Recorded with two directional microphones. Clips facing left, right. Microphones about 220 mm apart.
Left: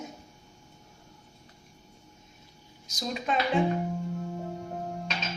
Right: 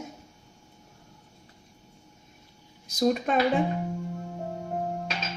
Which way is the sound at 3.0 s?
55° right (ahead or behind).